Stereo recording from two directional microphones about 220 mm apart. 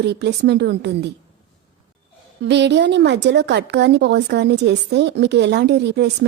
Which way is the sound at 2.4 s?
50° right (ahead or behind).